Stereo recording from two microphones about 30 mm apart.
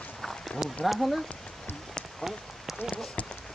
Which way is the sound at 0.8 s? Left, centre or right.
Centre.